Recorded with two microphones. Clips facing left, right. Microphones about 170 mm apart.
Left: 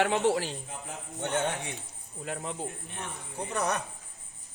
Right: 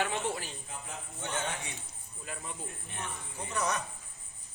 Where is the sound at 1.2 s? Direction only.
60° left (ahead or behind).